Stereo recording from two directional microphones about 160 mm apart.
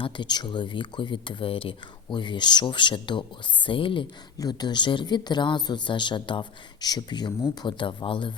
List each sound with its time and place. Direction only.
0.0 s speech: 30° left (ahead or behind)